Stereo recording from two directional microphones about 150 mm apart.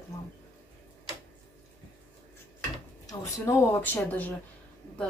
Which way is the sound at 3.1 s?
20° left (ahead or behind).